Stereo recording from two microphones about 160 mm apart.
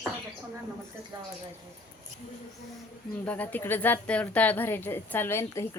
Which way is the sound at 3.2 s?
10° left (ahead or behind).